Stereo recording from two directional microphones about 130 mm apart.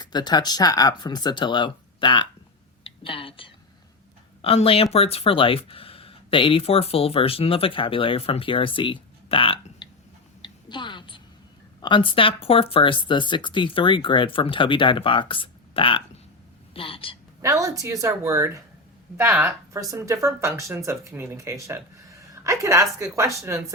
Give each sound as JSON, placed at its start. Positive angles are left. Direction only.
{"t": 0.0, "sound": "speech", "side_deg": 35}
{"t": 10.4, "sound": "a sound", "side_deg": 35}
{"t": 11.8, "sound": "a woman's voice", "side_deg": 35}
{"t": 17.4, "sound": "speech", "side_deg": -25}